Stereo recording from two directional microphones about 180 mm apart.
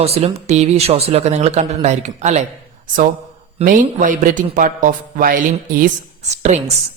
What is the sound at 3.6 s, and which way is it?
A man's voice, 45° right (ahead or behind).